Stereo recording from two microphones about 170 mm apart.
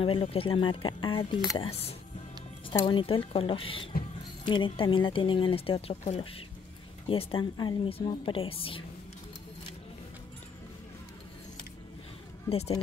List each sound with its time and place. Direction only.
0.0 s a woman's voice: 30° left (ahead or behind)
12.4 s speech: 35° left (ahead or behind)